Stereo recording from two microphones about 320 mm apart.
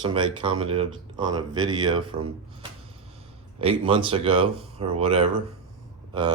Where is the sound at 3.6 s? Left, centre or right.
Centre.